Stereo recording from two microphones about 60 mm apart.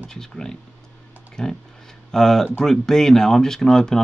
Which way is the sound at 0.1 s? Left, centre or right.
Centre.